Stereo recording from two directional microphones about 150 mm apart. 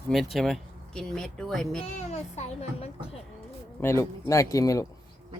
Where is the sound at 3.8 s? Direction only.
20° left (ahead or behind).